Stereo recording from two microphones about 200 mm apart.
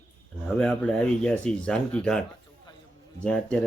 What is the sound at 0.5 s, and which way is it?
Speech, 5° left (ahead or behind).